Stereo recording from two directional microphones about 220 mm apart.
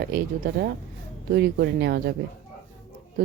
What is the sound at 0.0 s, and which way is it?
Speech, 45° right (ahead or behind).